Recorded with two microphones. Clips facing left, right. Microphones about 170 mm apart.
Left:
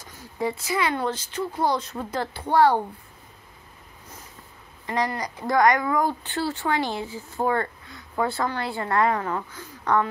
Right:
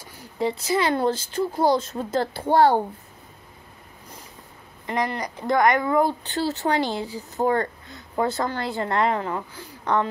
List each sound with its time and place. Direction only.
0.7 s speech: 35° right (ahead or behind)
4.8 s speech: 20° right (ahead or behind); by 7.3 s 40° right (ahead or behind)
7.4 s a sound: 35° right (ahead or behind)
8.4 s speech: 35° right (ahead or behind); by 10.0 s 20° right (ahead or behind)